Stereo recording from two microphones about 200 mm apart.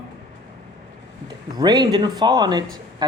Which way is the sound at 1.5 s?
20° right (ahead or behind).